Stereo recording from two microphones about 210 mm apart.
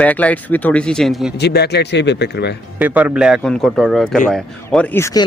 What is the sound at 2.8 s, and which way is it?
A man's voice, 5° right (ahead or behind).